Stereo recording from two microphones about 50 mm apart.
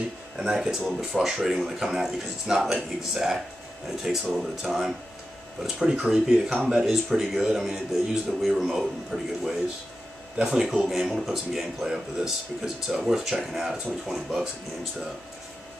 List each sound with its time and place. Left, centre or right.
0.4 s a man's voice: centre
10.9 s a man's voice: centre